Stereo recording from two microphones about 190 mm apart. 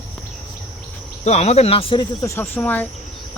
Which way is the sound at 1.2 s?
35° left (ahead or behind).